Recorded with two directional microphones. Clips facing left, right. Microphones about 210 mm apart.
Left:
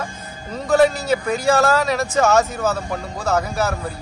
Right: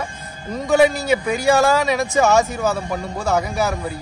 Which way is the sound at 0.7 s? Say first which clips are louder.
Even; centre (ahead or behind).